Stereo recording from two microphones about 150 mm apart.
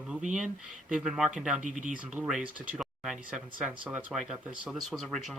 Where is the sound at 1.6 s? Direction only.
55° right (ahead or behind).